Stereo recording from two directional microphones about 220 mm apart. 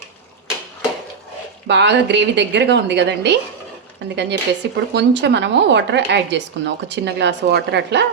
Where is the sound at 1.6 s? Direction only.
55° right (ahead or behind).